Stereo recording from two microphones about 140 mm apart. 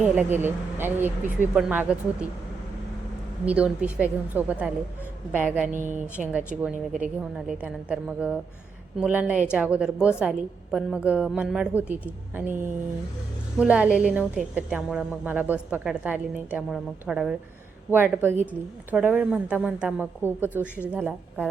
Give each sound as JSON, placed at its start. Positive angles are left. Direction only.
{"t": 0.0, "sound": "a woman's voice", "side_deg": -10}
{"t": 3.4, "sound": "a woman's voice", "side_deg": -10}
{"t": 5.9, "sound": "a woman's voice", "side_deg": -10}
{"t": 17.9, "sound": "a woman's voice", "side_deg": -15}